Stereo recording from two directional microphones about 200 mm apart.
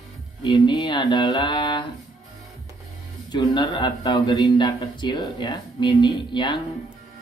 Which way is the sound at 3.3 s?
20° left (ahead or behind).